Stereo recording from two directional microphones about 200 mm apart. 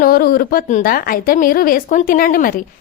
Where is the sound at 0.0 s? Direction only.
50° left (ahead or behind).